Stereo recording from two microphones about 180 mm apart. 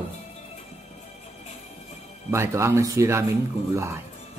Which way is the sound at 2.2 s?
15° right (ahead or behind).